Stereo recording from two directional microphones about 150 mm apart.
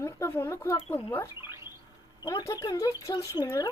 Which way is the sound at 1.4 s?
15° right (ahead or behind).